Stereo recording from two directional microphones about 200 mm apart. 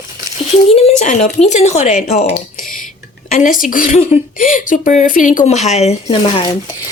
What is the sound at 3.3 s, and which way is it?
Speech, 40° left (ahead or behind).